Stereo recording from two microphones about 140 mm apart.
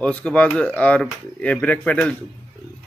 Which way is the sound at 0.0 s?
10° left (ahead or behind).